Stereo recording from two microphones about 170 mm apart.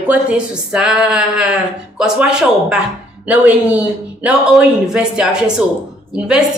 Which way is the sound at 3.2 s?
10° right (ahead or behind).